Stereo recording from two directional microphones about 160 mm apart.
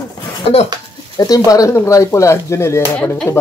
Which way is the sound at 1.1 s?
20° left (ahead or behind).